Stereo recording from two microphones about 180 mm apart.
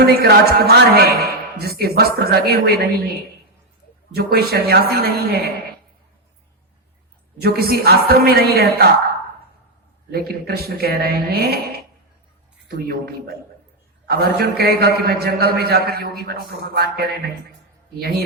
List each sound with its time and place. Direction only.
0.1 s a man's voice: 60° right (ahead or behind)
4.1 s a man's voice: 60° right (ahead or behind)
7.3 s a man's voice: 60° right (ahead or behind)
10.1 s a man's voice: 60° right (ahead or behind)
12.6 s a man's voice: 60° right (ahead or behind)